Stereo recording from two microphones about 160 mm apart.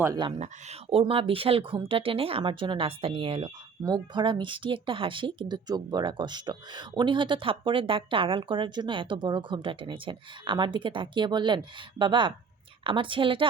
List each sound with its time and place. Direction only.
0.3 s speech: 45° right (ahead or behind)